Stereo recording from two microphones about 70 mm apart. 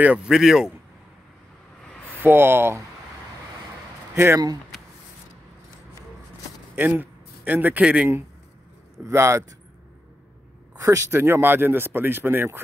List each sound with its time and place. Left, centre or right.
0.0 s speech: centre
0.3 s speech: centre
2.1 s speech: right
4.1 s speech: right
6.7 s a sound: right
7.8 s a man's voice: centre
9.0 s speech: right
10.8 s speech: right